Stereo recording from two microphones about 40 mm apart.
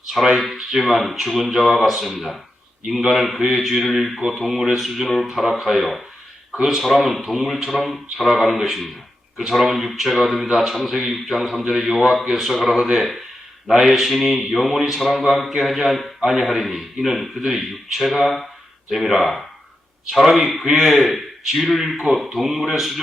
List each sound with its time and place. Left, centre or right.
0.1 s a man's voice: centre
18.9 s a man's voice: centre